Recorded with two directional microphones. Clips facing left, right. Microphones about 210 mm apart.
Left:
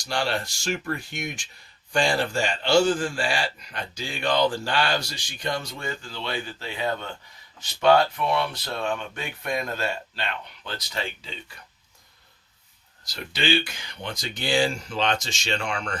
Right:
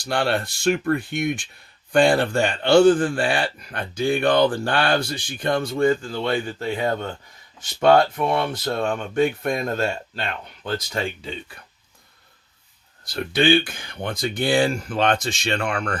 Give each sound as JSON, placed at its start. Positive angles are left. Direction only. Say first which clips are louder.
{"t": 0.0, "sound": "a man's voice", "louder": "right 5 dB", "side_deg": -60}
{"t": 13.1, "sound": "a man's voice", "louder": "right 8 dB", "side_deg": -55}